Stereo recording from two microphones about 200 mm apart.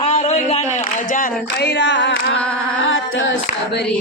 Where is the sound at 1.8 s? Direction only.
65° left (ahead or behind).